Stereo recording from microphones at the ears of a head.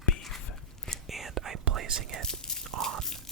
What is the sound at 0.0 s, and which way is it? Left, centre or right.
Dog, left.